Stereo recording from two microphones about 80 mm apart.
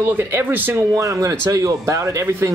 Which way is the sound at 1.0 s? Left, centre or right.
Right.